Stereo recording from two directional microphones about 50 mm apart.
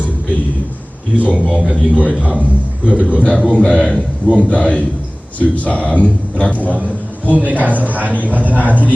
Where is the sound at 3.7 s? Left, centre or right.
Left.